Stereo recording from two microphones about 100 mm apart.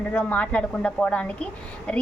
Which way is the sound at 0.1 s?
15° left (ahead or behind).